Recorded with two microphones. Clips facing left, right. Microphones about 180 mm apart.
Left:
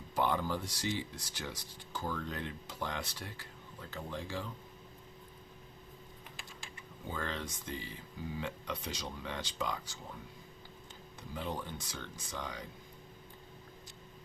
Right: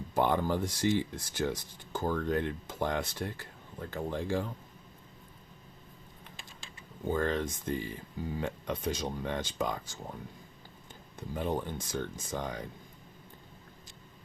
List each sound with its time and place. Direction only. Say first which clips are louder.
0.1 s speech: right 5 dB; 50° right (ahead or behind)
7.1 s speech: right 9 dB; 50° right (ahead or behind)
11.2 s speech: right 7 dB; 50° right (ahead or behind)